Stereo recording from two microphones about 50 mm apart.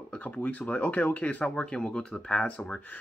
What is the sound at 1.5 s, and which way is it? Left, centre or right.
Speech, centre.